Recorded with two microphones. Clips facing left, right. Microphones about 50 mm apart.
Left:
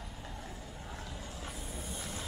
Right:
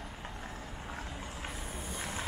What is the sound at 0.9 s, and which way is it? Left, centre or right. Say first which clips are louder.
Vehicle: right 3 dB; right.